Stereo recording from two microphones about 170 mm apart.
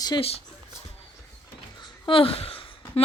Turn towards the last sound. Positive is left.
turn(degrees=35)  # may be behind; listen again after turning